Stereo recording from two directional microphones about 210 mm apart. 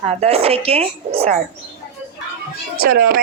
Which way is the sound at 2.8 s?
45° right (ahead or behind).